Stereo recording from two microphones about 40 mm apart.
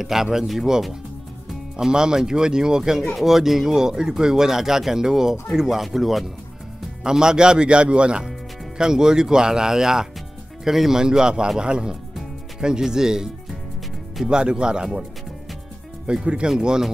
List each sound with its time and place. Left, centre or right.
0.0 s speech: centre
1.9 s speech: centre
7.0 s speech: centre
8.2 s speech: centre
16.1 s speech: right